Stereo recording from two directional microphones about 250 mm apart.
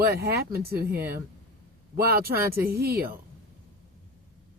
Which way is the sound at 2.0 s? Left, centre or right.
Right.